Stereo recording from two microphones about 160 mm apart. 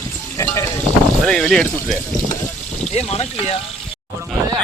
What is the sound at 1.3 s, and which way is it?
Speech, centre (ahead or behind).